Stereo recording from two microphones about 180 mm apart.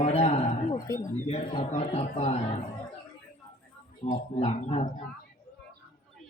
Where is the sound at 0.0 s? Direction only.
35° left (ahead or behind).